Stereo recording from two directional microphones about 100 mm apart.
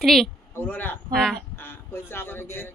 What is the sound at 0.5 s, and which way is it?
Speech, 20° left (ahead or behind).